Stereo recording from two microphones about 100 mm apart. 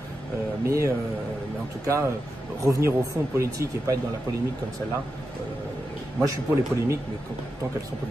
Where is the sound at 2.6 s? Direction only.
30° right (ahead or behind).